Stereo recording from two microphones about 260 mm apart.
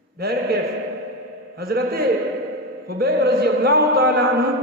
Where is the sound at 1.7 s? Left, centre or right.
Right.